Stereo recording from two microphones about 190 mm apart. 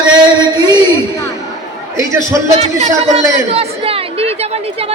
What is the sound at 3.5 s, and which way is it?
Chatter, 30° right (ahead or behind).